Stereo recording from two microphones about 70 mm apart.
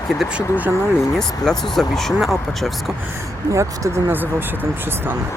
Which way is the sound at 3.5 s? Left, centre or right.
Right.